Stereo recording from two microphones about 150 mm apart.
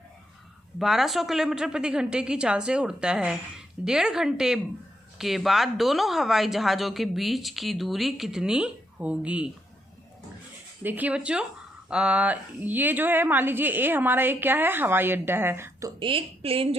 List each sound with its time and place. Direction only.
0.8 s speech: centre (ahead or behind)
10.8 s a woman's voice: 10° right (ahead or behind)
16.0 s a woman's voice: 35° right (ahead or behind)